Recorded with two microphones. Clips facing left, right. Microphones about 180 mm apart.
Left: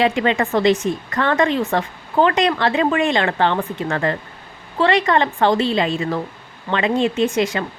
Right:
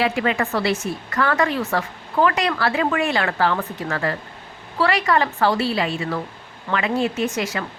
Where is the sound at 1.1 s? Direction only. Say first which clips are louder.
Left 2 dB; 30° left (ahead or behind).